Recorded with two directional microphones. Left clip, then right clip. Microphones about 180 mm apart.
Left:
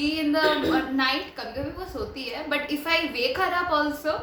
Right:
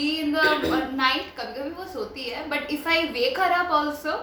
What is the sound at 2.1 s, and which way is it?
A woman's voice, 15° left (ahead or behind).